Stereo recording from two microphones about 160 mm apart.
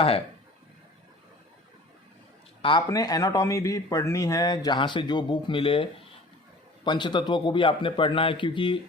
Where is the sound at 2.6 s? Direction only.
30° left (ahead or behind).